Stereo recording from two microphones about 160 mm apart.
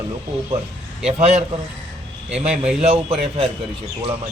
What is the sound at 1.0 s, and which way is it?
Speech, 40° right (ahead or behind).